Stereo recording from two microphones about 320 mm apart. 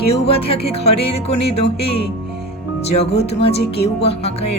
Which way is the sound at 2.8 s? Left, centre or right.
Centre.